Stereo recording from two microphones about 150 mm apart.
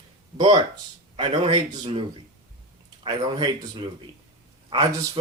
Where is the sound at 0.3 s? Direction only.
30° right (ahead or behind).